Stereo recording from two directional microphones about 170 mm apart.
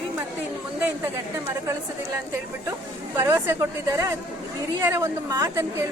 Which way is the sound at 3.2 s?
15° right (ahead or behind).